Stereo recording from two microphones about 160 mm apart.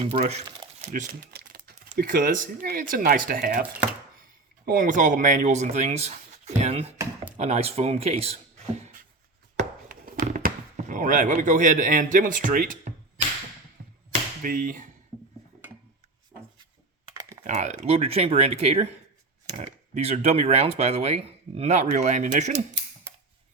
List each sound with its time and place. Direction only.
0.0 s speech: 40° right (ahead or behind)
1.3 s speech: 70° right (ahead or behind); by 8.4 s 40° right (ahead or behind)
9.9 s speech: 60° right (ahead or behind)
14.4 s speech: 60° right (ahead or behind)
17.4 s speech: 45° right (ahead or behind)
19.9 s speech: 40° right (ahead or behind)